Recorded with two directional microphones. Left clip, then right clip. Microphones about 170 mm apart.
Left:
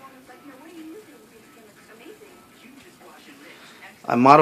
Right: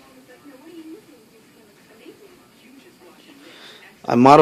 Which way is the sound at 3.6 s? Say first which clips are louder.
Right 2 dB; 45° right (ahead or behind).